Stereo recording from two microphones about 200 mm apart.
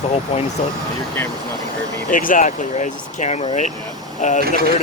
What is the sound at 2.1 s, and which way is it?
Speech, 40° left (ahead or behind).